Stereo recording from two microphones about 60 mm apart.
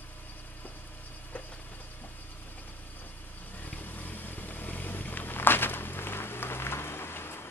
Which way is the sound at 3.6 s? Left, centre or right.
Left.